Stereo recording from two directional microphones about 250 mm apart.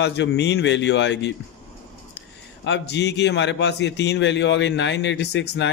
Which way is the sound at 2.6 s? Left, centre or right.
Left.